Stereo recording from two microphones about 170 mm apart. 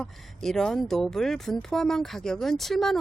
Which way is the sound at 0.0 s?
5° left (ahead or behind).